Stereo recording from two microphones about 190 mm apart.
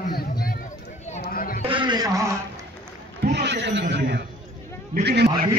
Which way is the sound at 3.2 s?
60° right (ahead or behind).